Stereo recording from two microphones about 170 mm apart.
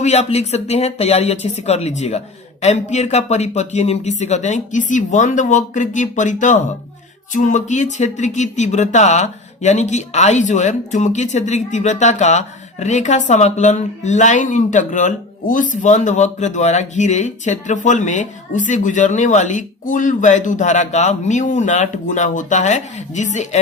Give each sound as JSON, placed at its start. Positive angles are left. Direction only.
{"t": 0.0, "sound": "speech", "side_deg": 40}